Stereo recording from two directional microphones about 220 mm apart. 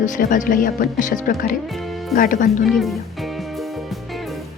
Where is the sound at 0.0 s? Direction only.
35° left (ahead or behind).